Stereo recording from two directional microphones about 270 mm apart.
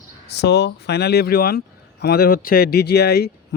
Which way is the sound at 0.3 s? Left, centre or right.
Left.